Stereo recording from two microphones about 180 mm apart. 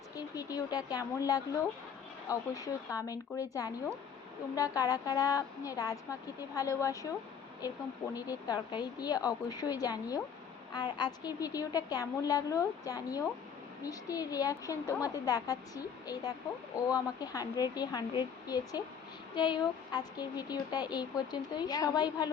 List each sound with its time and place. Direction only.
0.2 s speech: 20° left (ahead or behind)